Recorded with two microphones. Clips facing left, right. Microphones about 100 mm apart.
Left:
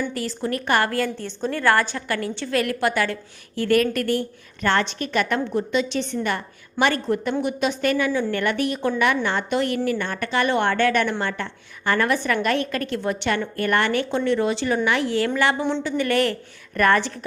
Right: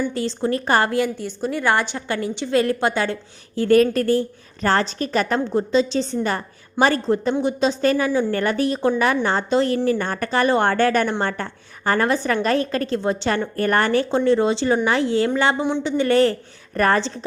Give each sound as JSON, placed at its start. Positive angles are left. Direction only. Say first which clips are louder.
{"t": 0.1, "sound": "a woman's voice", "louder": "right 4 dB", "side_deg": -25}
{"t": 0.9, "sound": "a woman's voice", "louder": "right 3 dB", "side_deg": -15}